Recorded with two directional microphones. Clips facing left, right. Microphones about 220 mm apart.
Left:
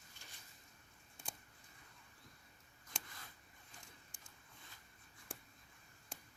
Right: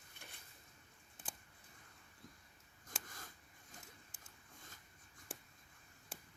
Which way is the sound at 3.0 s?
45° right (ahead or behind).